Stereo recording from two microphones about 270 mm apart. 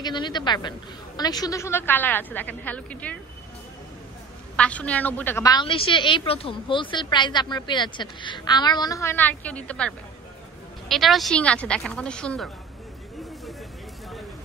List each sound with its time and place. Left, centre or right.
0.0 s a woman's voice: centre
4.6 s a woman's voice: centre